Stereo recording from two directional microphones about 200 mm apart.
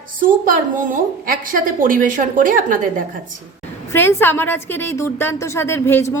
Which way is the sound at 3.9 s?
10° left (ahead or behind).